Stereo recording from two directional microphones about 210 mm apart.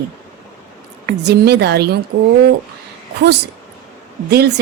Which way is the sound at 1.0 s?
55° right (ahead or behind).